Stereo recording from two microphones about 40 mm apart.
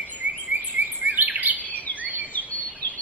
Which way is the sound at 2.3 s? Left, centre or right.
Left.